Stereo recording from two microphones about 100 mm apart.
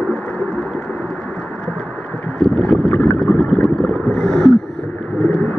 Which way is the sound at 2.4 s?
5° left (ahead or behind).